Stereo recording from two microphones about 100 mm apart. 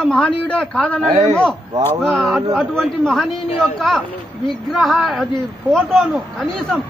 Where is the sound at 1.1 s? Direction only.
90° right.